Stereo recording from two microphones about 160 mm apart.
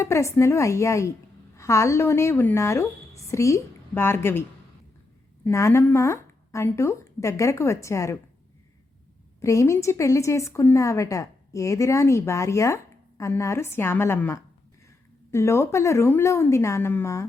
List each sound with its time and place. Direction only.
0.0 s a woman's voice: 15° left (ahead or behind)
5.5 s a woman's voice: 20° left (ahead or behind)
9.4 s a woman's voice: 20° left (ahead or behind)